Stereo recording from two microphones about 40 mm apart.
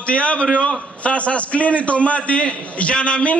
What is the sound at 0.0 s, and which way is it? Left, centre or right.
A man's voice, left.